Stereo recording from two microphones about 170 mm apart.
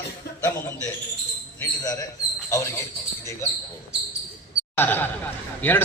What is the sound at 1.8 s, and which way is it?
A man's voice, 20° left (ahead or behind).